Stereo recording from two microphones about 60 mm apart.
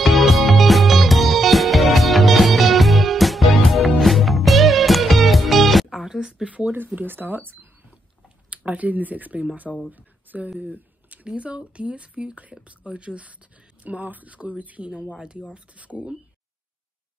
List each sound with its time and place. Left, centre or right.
0.0 s music: centre
6.5 s speech: right
10.6 s a sound: right
11.2 s speech: centre